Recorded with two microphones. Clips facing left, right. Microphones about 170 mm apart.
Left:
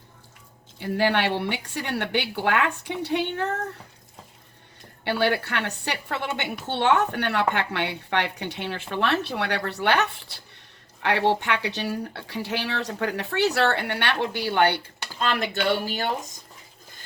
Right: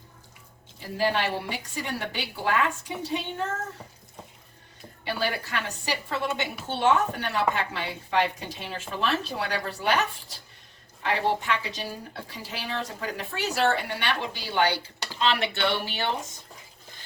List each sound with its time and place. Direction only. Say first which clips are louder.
0.8 s a woman's voice: left 3 dB; 70° left (ahead or behind)
5.0 s a woman's voice: left 6 dB; 70° left (ahead or behind)
15.2 s speech: left 1 dB; 45° left (ahead or behind)